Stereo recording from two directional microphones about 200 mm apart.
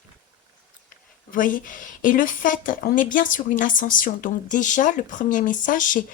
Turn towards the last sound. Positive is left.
turn(degrees=40)  # may be behind; listen again after turning